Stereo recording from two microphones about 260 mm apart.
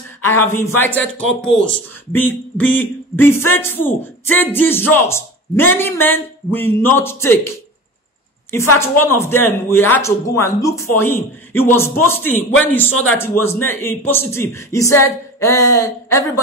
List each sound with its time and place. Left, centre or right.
0.2 s speech: centre
8.7 s speech: centre